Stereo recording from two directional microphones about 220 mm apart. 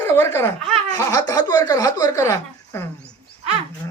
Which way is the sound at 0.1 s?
10° left (ahead or behind).